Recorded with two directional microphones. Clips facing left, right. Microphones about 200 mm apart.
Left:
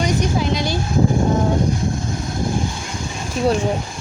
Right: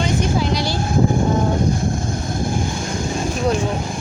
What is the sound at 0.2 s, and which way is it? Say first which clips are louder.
Speech: even; 20° left (ahead or behind).